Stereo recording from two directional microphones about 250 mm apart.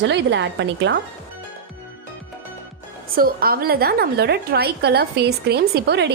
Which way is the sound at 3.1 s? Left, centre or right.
Right.